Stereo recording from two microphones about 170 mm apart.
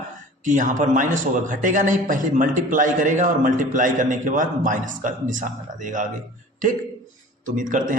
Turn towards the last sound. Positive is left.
turn(degrees=-50)  # may be behind; listen again after turning